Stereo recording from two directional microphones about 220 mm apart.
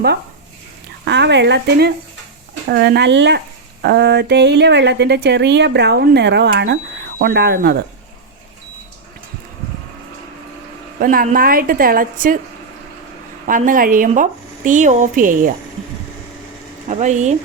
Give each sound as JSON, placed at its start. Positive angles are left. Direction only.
{"t": 1.0, "sound": "speech", "side_deg": -50}
{"t": 11.0, "sound": "a woman's voice", "side_deg": -40}
{"t": 13.5, "sound": "a woman's voice", "side_deg": -40}
{"t": 16.9, "sound": "a woman's voice", "side_deg": -30}